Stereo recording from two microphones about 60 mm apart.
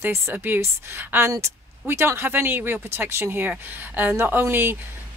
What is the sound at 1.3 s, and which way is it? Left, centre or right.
Speech, right.